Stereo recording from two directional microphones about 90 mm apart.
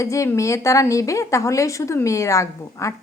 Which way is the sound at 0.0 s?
35° left (ahead or behind).